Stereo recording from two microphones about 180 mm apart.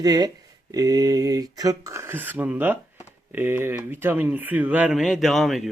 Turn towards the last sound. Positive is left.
turn(degrees=0)  # may be behind; listen again after turning